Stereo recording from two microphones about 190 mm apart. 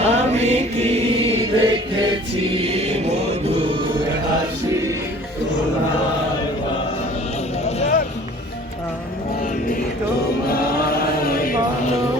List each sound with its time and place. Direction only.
0.0 s chant: 35° right (ahead or behind)
7.8 s music: 35° left (ahead or behind)
10.4 s chant: 50° left (ahead or behind)